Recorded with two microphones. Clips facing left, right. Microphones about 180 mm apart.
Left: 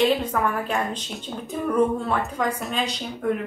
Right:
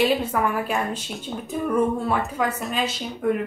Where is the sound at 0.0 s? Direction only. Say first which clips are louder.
Even; 10° right (ahead or behind).